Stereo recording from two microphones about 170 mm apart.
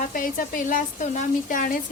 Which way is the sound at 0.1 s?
55° left (ahead or behind).